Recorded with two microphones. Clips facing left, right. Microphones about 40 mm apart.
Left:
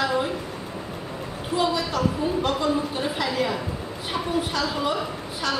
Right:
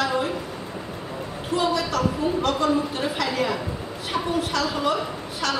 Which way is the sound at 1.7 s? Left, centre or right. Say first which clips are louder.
Right 1 dB; right.